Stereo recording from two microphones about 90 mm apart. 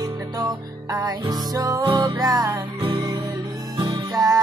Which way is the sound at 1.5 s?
40° right (ahead or behind).